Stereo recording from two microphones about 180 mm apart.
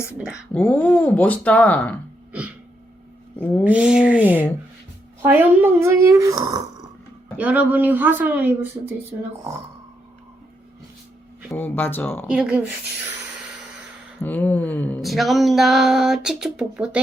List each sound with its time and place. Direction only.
0.5 s speech: 10° left (ahead or behind)
3.6 s speech: 5° right (ahead or behind)
7.3 s speech: 10° right (ahead or behind)
11.5 s speech: 10° left (ahead or behind)
12.3 s speech: 5° right (ahead or behind)
14.2 s a sound: 10° left (ahead or behind)